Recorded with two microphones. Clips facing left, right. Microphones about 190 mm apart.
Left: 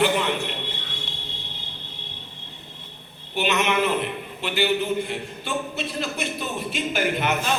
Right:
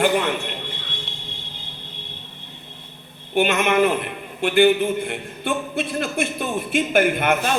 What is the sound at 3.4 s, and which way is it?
A man's voice, 50° right (ahead or behind).